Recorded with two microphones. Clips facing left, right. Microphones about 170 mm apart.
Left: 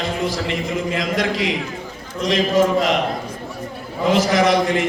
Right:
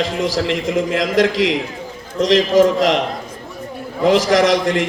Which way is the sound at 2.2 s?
90° right.